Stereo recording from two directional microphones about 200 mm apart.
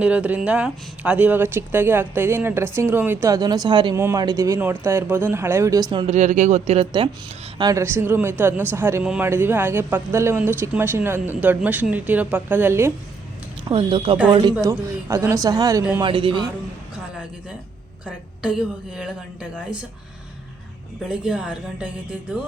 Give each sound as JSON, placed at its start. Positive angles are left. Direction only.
{"t": 0.0, "sound": "speech", "side_deg": -5}
{"t": 5.9, "sound": "speech", "side_deg": -25}
{"t": 6.1, "sound": "speech", "side_deg": -35}
{"t": 7.6, "sound": "speech", "side_deg": -15}
{"t": 13.7, "sound": "speech", "side_deg": -25}
{"t": 14.5, "sound": "speech", "side_deg": -15}
{"t": 18.9, "sound": "speech", "side_deg": -5}
{"t": 21.1, "sound": "speech", "side_deg": -5}